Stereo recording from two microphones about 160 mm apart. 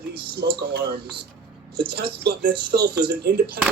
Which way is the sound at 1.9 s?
85° right.